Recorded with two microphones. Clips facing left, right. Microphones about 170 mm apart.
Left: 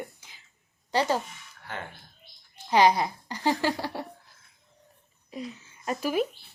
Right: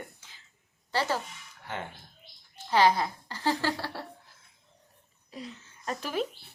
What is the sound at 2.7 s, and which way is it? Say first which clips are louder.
Speech: left 2 dB; 15° left (ahead or behind).